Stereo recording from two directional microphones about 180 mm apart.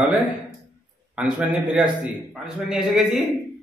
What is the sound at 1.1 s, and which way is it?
A man's voice, 5° right (ahead or behind).